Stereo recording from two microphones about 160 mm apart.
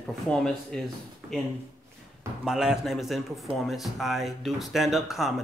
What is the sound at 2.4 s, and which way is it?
Speech, 5° right (ahead or behind).